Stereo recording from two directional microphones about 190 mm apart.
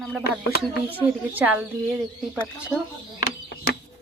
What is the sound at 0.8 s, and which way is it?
Speech, 10° right (ahead or behind).